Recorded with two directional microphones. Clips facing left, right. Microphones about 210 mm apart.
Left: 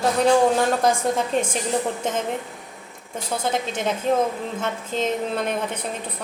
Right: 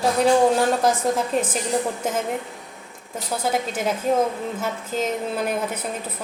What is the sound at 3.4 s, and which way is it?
A woman's voice, 5° right (ahead or behind).